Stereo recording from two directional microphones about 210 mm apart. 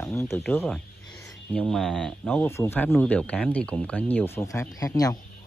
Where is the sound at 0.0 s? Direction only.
10° left (ahead or behind).